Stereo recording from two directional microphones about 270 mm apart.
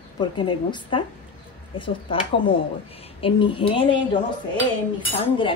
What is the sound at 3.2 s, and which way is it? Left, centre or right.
Speech, centre.